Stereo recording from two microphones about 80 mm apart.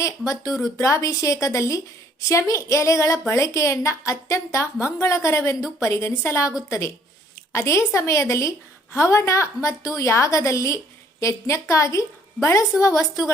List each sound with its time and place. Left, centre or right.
0.0 s a woman's voice: left